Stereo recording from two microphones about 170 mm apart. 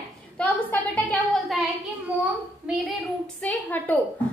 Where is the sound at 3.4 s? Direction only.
10° left (ahead or behind).